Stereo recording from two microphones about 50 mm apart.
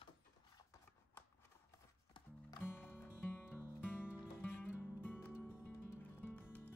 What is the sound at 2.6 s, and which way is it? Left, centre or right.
Music, left.